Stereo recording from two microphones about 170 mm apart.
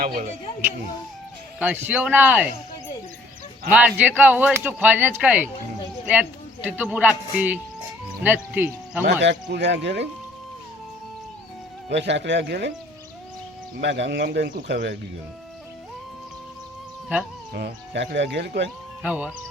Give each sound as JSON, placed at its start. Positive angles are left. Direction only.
{"t": 0.0, "sound": "speech", "side_deg": -60}
{"t": 1.5, "sound": "speech", "side_deg": -10}
{"t": 3.7, "sound": "speech", "side_deg": -10}
{"t": 9.5, "sound": "speech", "side_deg": -90}
{"t": 11.9, "sound": "speech", "side_deg": -90}
{"t": 13.8, "sound": "speech", "side_deg": -90}
{"t": 17.5, "sound": "speech", "side_deg": -65}
{"t": 19.0, "sound": "speech", "side_deg": -10}